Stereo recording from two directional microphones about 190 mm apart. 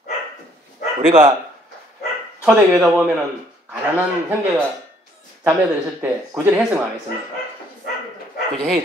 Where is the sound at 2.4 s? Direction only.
5° right (ahead or behind).